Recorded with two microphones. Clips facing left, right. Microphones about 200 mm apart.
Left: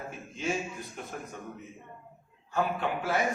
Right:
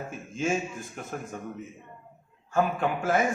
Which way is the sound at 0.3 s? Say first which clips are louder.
Right 4 dB; 50° right (ahead or behind).